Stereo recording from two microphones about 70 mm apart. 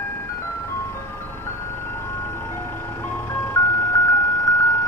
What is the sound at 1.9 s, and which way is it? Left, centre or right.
Vehicle, left.